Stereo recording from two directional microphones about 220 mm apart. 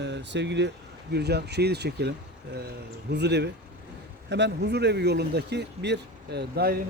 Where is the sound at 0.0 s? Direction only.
55° right (ahead or behind).